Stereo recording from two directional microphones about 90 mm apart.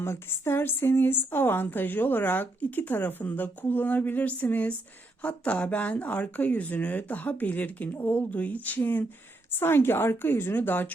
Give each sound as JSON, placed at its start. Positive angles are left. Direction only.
{"t": 0.0, "sound": "a woman's voice", "side_deg": 30}